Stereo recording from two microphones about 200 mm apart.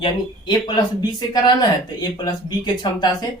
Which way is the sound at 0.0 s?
20° left (ahead or behind).